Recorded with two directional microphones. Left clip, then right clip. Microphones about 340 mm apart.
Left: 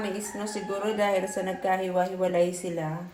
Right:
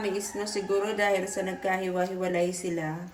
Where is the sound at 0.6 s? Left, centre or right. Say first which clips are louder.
Even; centre.